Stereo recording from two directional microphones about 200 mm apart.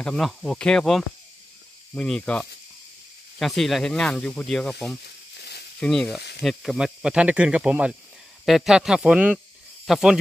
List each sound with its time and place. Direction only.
0.0 s speech: 5° left (ahead or behind)
5.0 s snake: 55° left (ahead or behind)
5.8 s speech: 5° left (ahead or behind)